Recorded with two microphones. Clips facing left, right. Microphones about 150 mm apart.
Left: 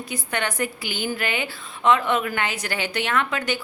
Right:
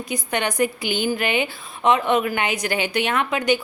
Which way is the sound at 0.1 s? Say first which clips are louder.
Right 3 dB; 15° right (ahead or behind).